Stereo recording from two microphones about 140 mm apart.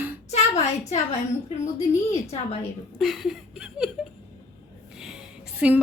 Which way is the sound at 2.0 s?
45° left (ahead or behind).